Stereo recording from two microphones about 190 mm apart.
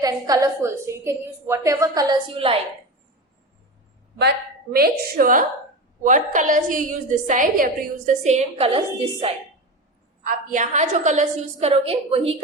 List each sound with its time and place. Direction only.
0.0 s a woman's voice: 20° right (ahead or behind)
4.2 s a woman's voice: 55° right (ahead or behind); by 8.8 s 30° right (ahead or behind)
10.2 s a woman's voice: 45° right (ahead or behind)